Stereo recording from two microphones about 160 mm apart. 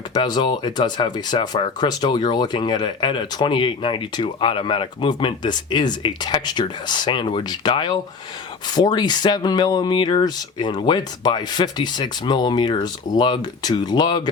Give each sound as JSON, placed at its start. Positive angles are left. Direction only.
{"t": 0.1, "sound": "speech", "side_deg": 25}